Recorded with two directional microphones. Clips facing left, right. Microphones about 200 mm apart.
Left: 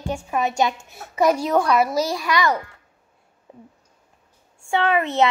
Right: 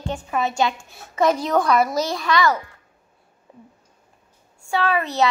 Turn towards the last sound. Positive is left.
turn(degrees=20)  # may be behind; listen again after turning